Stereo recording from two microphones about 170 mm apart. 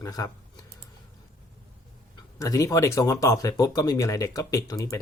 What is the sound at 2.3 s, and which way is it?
Speech, 20° left (ahead or behind).